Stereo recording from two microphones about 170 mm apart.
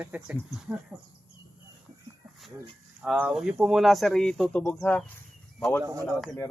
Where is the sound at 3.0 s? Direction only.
5° right (ahead or behind).